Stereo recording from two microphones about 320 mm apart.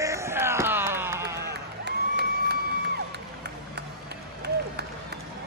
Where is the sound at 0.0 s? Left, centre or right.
Centre.